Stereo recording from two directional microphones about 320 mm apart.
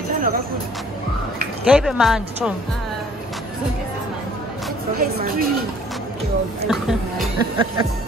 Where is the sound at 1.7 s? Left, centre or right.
Centre.